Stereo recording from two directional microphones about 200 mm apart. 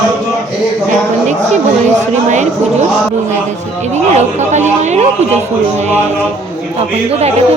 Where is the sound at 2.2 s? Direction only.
35° right (ahead or behind).